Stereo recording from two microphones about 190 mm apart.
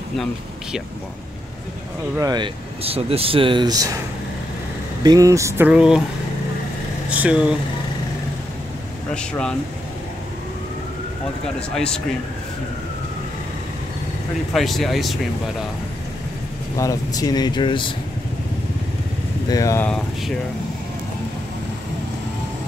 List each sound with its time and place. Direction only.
2.1 s speech: 20° right (ahead or behind)
5.0 s speech: 20° right (ahead or behind)
7.1 s speech: 5° right (ahead or behind)
9.1 s speech: 5° left (ahead or behind)
11.7 s speech: 5° left (ahead or behind)
14.5 s speech: centre (ahead or behind)
16.7 s speech: 20° left (ahead or behind)
19.5 s speech: 15° left (ahead or behind)